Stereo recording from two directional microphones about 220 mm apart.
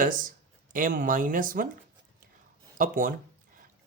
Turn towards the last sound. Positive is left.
turn(degrees=-40)  # may be behind; listen again after turning